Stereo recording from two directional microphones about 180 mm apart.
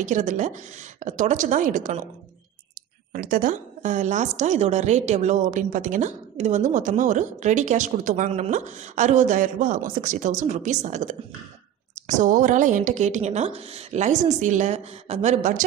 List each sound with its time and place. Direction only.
0.0 s a woman's voice: 45° right (ahead or behind)
3.1 s a woman's voice: 50° right (ahead or behind)